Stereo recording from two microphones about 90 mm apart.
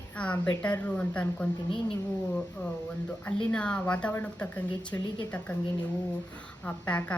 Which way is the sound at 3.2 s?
15° left (ahead or behind).